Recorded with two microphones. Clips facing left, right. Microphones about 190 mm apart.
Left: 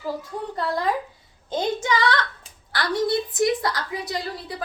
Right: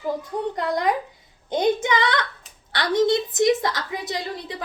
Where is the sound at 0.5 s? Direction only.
15° right (ahead or behind).